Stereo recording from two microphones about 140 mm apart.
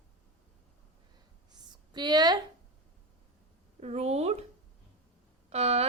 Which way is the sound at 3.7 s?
50° right (ahead or behind).